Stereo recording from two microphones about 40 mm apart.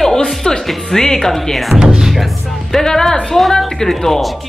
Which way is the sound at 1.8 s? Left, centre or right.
Centre.